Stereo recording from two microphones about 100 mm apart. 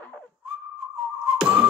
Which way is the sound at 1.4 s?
10° right (ahead or behind).